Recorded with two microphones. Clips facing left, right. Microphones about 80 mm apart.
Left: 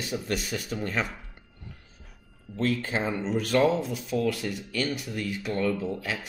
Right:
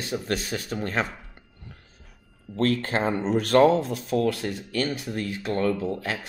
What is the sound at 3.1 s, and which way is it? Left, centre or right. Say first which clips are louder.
Speech: right 5 dB; right.